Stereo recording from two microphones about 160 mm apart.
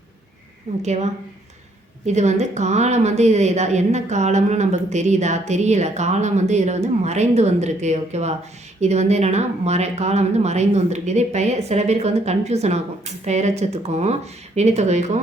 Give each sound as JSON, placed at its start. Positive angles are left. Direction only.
{"t": 0.8, "sound": "speech", "side_deg": -45}